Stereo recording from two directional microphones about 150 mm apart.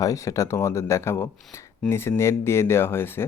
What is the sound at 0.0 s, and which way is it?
Speech, 20° left (ahead or behind).